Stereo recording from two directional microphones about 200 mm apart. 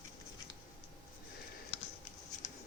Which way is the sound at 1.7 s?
30° left (ahead or behind).